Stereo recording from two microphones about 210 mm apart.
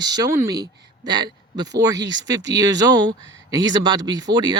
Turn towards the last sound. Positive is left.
turn(degrees=-20)  # may be behind; listen again after turning